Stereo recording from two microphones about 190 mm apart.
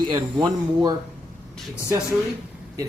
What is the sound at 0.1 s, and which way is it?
Speech, 20° right (ahead or behind).